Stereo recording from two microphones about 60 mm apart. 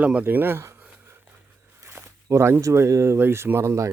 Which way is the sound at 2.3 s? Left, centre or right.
Right.